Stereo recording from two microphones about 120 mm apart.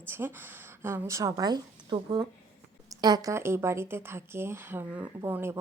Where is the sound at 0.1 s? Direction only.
20° right (ahead or behind).